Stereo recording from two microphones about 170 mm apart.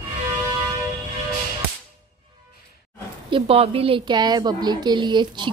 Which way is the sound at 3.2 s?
30° right (ahead or behind).